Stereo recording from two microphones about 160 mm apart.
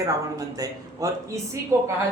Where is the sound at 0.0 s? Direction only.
20° right (ahead or behind).